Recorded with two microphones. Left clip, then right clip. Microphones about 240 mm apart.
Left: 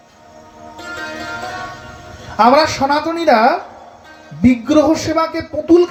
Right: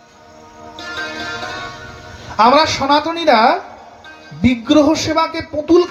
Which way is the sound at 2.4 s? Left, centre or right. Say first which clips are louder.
Even; right.